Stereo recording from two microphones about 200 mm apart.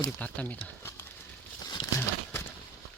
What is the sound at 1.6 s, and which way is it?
Crumpling, 20° left (ahead or behind).